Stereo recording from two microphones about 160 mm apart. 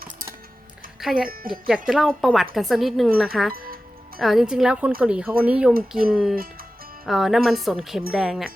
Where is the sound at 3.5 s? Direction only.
65° right (ahead or behind).